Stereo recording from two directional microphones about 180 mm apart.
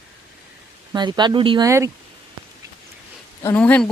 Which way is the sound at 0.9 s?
25° right (ahead or behind).